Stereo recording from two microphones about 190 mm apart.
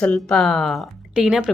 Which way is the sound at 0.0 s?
5° left (ahead or behind).